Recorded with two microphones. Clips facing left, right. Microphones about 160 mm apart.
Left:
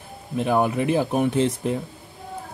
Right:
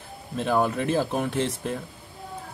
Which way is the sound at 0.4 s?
15° left (ahead or behind).